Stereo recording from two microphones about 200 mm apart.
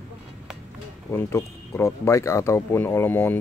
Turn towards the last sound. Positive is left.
turn(degrees=10)  # may be behind; listen again after turning